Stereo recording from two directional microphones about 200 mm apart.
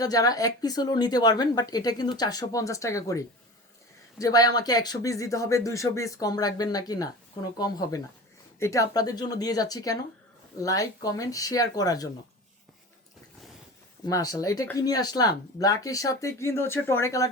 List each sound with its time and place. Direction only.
0.0 s speech: 20° left (ahead or behind)
14.1 s speech: 20° left (ahead or behind)